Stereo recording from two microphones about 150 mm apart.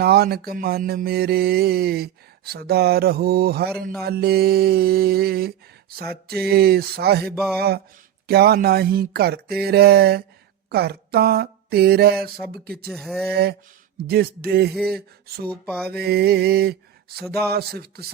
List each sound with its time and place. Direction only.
0.0 s mantra: 90° right
10.7 s a sound: 90° right
12.6 s mantra: 90° right
12.9 s speech: centre (ahead or behind)
13.3 s mantra: 90° right